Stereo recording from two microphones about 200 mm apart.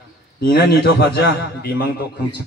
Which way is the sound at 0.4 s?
50° left (ahead or behind).